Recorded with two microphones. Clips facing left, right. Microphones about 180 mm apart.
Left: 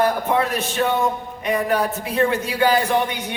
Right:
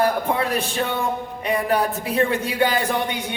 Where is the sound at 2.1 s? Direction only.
35° right (ahead or behind).